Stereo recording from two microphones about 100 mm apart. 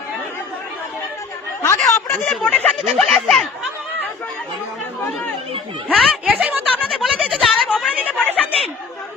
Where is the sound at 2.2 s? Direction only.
Centre (ahead or behind).